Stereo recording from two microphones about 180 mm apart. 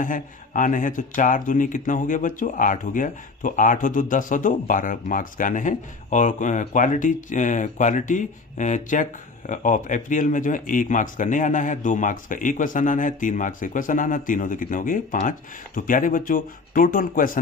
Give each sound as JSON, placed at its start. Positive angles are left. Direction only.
{"t": 0.0, "sound": "speech", "side_deg": 45}